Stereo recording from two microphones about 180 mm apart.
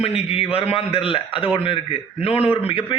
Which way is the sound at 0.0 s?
35° left (ahead or behind).